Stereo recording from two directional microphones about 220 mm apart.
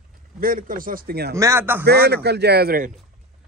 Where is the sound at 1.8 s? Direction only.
45° right (ahead or behind).